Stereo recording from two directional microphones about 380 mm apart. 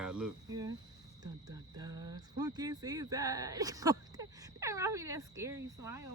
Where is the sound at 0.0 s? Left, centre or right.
Centre.